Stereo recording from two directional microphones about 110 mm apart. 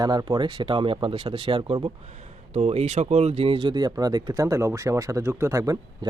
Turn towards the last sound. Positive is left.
turn(degrees=-35)  # may be behind; listen again after turning